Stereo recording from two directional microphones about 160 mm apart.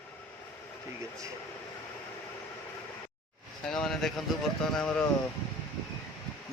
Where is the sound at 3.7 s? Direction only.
5° left (ahead or behind).